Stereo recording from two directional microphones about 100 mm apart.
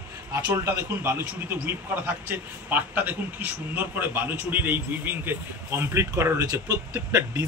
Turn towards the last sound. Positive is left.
turn(degrees=-25)  # may be behind; listen again after turning